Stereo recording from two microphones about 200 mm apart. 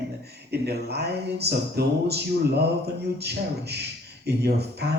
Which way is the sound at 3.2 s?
55° right (ahead or behind).